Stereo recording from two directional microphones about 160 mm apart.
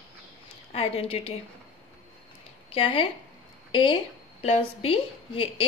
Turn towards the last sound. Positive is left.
turn(degrees=35)  # may be behind; listen again after turning